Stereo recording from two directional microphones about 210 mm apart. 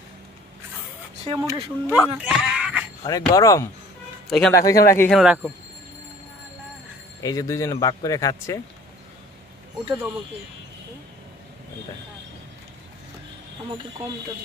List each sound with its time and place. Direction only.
1.3 s speech: 15° right (ahead or behind)
3.1 s speech: 15° left (ahead or behind)
4.3 s speech: centre (ahead or behind)
4.6 s speech: 15° left (ahead or behind)
5.1 s speech: 5° right (ahead or behind)
7.2 s speech: 15° left (ahead or behind)